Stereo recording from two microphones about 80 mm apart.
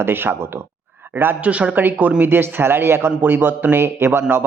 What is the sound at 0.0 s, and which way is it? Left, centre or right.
Speech, right.